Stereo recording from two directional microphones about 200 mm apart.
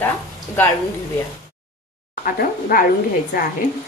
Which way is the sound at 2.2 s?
45° left (ahead or behind).